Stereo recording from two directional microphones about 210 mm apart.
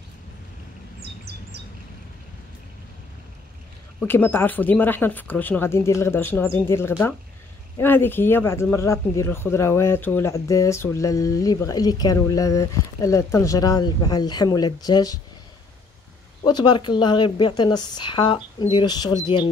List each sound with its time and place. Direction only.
4.0 s speech: 10° left (ahead or behind)
16.4 s speech: 20° left (ahead or behind)